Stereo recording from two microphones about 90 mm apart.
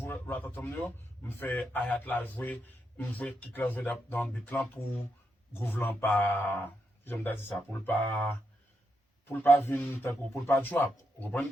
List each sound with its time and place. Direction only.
0.0 s a man's voice: 20° left (ahead or behind)
8.1 s a man's voice: 30° left (ahead or behind)